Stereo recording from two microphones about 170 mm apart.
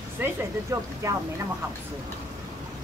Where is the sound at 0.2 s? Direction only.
15° right (ahead or behind).